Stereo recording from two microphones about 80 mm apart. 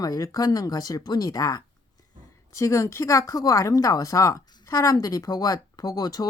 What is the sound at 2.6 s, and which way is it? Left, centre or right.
A woman's voice, left.